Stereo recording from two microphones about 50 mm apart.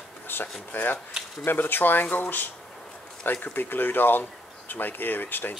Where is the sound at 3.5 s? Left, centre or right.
Left.